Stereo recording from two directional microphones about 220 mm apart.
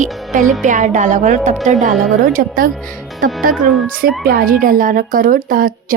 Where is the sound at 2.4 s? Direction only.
40° right (ahead or behind).